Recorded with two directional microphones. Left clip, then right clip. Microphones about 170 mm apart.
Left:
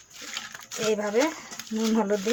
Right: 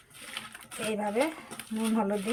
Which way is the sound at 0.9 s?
60° left (ahead or behind).